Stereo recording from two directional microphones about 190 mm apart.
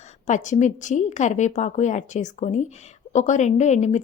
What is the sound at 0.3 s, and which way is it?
Speech, 40° left (ahead or behind).